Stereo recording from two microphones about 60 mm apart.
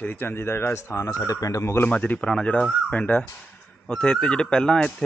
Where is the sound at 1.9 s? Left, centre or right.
Centre.